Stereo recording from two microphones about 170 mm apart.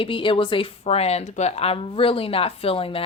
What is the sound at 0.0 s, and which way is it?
Speech, 30° left (ahead or behind).